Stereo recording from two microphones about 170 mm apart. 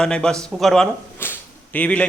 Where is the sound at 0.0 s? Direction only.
5° left (ahead or behind).